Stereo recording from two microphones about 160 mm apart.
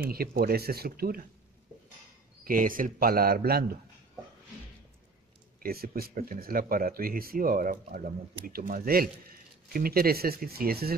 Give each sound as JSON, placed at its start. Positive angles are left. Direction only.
{"t": 0.1, "sound": "speech", "side_deg": -70}
{"t": 2.4, "sound": "speech", "side_deg": -60}
{"t": 5.6, "sound": "speech", "side_deg": -70}